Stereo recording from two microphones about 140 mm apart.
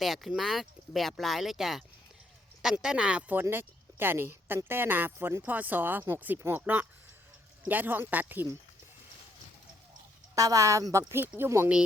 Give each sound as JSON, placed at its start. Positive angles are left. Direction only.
{"t": 0.0, "sound": "speech", "side_deg": 0}
{"t": 10.3, "sound": "a woman's voice", "side_deg": -25}